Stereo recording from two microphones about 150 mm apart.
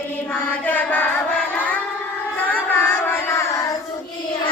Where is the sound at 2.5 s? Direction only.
15° left (ahead or behind).